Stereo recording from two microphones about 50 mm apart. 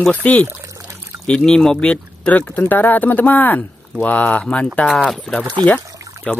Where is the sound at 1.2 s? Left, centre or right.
Centre.